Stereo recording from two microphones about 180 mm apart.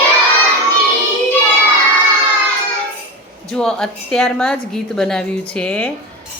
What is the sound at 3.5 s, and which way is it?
A woman's voice, 5° left (ahead or behind).